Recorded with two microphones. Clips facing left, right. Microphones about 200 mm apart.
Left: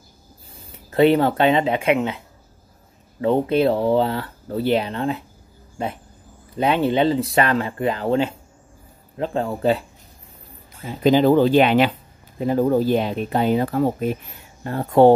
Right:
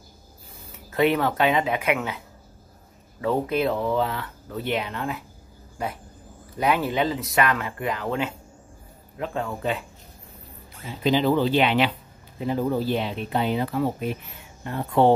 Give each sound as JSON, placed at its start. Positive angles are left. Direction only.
{"t": 0.6, "sound": "speech", "side_deg": 30}
{"t": 11.1, "sound": "speech", "side_deg": 45}